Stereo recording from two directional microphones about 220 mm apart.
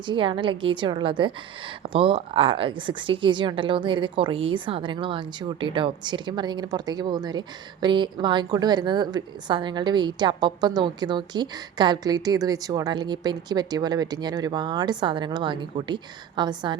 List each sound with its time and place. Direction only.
0.0 s speech: 20° right (ahead or behind)